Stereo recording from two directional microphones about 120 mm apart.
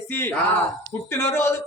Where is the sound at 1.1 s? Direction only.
20° left (ahead or behind).